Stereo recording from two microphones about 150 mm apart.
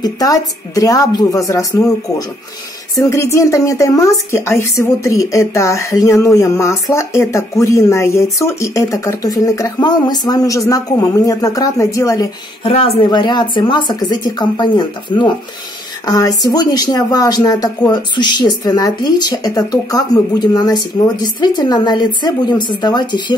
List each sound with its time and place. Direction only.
0.0 s speech: 25° left (ahead or behind)
12.6 s speech: 40° left (ahead or behind)
13.1 s speech: 30° left (ahead or behind)